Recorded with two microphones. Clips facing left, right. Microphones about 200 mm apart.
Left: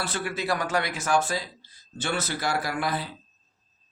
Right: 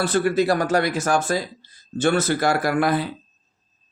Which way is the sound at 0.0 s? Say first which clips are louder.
Right 11 dB; 45° right (ahead or behind).